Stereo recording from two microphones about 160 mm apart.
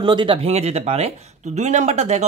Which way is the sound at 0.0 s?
30° right (ahead or behind).